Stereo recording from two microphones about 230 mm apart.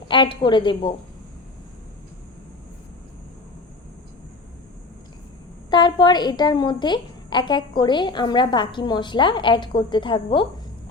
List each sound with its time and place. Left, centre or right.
0.1 s a woman's voice: left
5.7 s a woman's voice: centre